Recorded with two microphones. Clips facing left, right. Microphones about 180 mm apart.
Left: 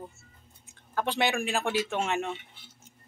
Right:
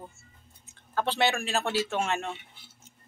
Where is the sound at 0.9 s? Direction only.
15° left (ahead or behind).